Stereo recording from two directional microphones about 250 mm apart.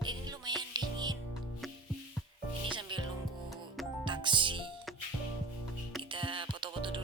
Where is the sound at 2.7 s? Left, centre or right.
Centre.